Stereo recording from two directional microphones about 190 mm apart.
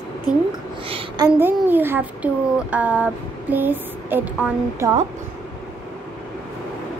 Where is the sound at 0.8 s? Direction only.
30° right (ahead or behind).